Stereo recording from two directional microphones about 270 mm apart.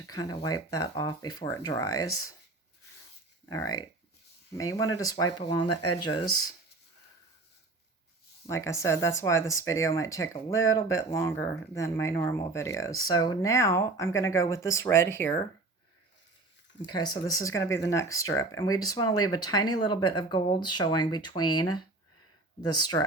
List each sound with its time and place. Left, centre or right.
0.1 s speech: centre
3.5 s speech: centre
8.4 s speech: centre
16.7 s speech: centre